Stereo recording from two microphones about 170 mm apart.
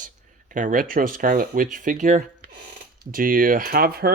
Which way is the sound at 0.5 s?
50° right (ahead or behind).